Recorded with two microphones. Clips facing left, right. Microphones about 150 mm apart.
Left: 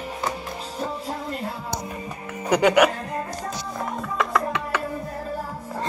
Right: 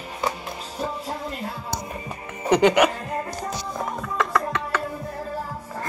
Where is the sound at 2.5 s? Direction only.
5° left (ahead or behind).